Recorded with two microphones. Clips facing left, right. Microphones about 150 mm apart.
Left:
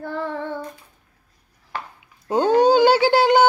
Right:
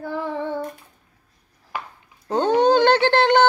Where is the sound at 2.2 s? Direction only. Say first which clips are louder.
Left 1 dB; 5° left (ahead or behind).